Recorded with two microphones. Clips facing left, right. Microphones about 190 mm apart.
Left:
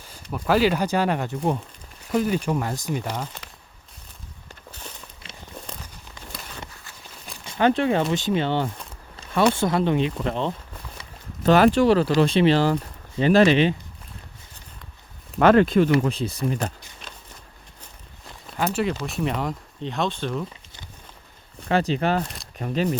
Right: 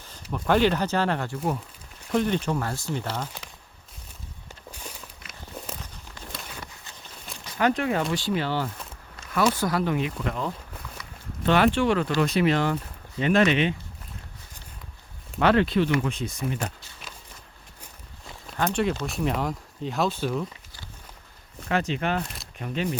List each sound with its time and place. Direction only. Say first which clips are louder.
0.3 s speech: left 1 dB; 5° left (ahead or behind)
4.7 s walk: even; 10° right (ahead or behind)
5.2 s walk: left 3 dB; 30° left (ahead or behind)
7.4 s speech: left 4 dB; 30° left (ahead or behind)
11.4 s speech: left 5 dB; 40° left (ahead or behind)
15.4 s speech: left 5 dB; 45° left (ahead or behind)
18.5 s speech: left 1 dB; 5° left (ahead or behind)
21.7 s speech: left 4 dB; 35° left (ahead or behind)